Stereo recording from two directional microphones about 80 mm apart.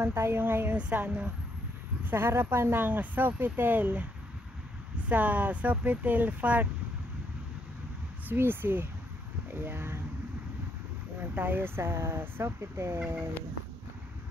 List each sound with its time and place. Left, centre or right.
0.0 s a woman's voice: right
8.3 s speech: right
11.3 s speech: right